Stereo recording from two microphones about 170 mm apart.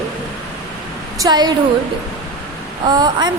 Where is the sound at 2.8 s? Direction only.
25° right (ahead or behind).